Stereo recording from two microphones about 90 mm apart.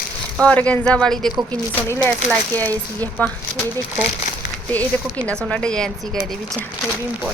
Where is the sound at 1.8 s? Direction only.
30° left (ahead or behind).